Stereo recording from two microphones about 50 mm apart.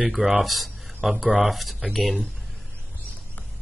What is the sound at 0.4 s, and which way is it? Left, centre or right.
Speech, centre.